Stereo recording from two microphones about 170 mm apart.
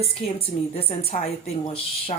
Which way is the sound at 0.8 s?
35° left (ahead or behind).